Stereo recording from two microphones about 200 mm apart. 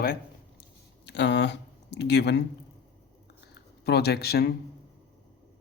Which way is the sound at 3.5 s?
55° left (ahead or behind).